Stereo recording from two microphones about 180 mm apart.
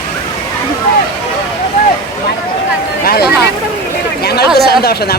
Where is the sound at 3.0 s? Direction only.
60° left (ahead or behind).